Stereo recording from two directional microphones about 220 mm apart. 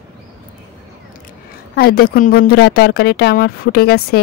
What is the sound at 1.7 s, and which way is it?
A woman's voice, 45° left (ahead or behind).